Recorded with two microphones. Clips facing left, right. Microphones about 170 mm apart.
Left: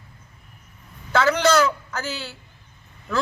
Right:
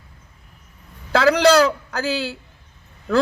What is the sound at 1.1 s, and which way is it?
A man's voice, 35° right (ahead or behind).